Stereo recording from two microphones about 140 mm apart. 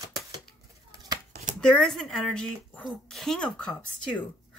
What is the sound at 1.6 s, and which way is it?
Speech, 5° left (ahead or behind).